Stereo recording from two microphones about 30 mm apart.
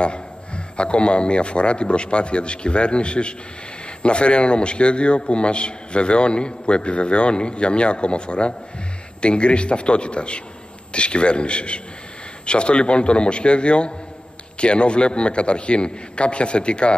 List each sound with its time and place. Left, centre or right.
0.7 s a man's voice: left